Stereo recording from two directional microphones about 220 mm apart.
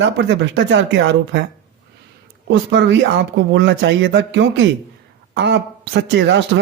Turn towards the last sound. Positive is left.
turn(degrees=-55)  # may be behind; listen again after turning